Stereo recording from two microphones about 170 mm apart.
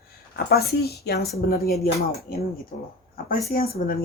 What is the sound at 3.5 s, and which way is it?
Speech, 60° left (ahead or behind).